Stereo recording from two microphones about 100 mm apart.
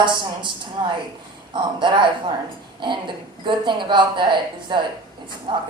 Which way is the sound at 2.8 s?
55° right (ahead or behind).